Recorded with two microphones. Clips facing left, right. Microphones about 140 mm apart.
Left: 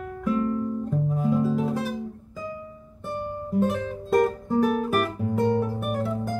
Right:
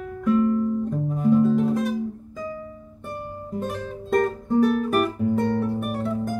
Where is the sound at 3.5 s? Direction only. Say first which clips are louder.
Left 5 dB; centre (ahead or behind).